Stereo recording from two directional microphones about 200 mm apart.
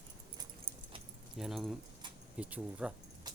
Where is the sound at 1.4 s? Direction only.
Centre (ahead or behind).